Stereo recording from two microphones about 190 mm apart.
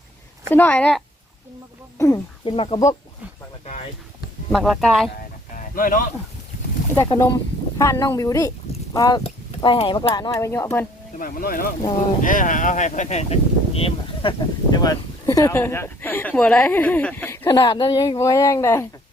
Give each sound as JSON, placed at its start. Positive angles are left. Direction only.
{"t": 0.5, "sound": "speech", "side_deg": 10}
{"t": 2.0, "sound": "speech", "side_deg": 15}
{"t": 2.4, "sound": "speech", "side_deg": 30}
{"t": 4.5, "sound": "speech", "side_deg": 0}
{"t": 5.5, "sound": "speech", "side_deg": 45}
{"t": 6.9, "sound": "speech", "side_deg": 15}
{"t": 11.2, "sound": "speech", "side_deg": 50}